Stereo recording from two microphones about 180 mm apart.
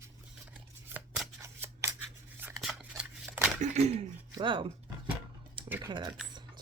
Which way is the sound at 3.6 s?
35° right (ahead or behind).